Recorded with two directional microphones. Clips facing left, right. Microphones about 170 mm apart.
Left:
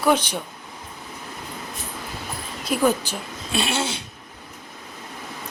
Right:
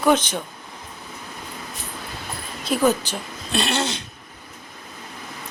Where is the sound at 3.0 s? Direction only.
10° left (ahead or behind).